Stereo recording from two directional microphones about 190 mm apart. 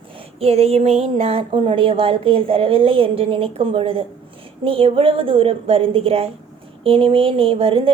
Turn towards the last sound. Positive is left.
turn(degrees=-30)  # may be behind; listen again after turning